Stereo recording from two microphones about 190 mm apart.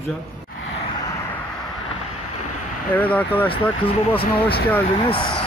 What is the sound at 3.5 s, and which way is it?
Speech, 30° left (ahead or behind).